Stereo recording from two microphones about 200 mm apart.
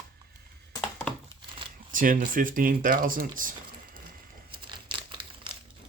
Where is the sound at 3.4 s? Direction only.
45° right (ahead or behind).